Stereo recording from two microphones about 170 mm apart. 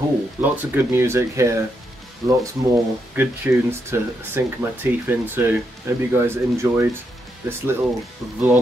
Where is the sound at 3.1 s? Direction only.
10° right (ahead or behind).